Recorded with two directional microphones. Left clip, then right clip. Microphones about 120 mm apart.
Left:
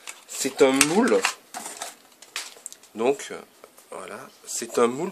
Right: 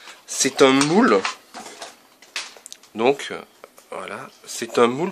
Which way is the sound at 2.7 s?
5° right (ahead or behind).